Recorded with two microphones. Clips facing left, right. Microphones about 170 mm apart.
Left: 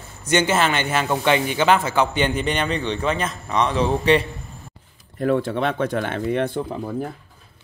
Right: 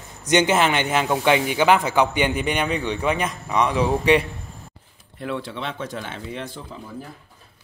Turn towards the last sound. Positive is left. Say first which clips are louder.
# left 10 dB
turn(degrees=60)  # may be behind; listen again after turning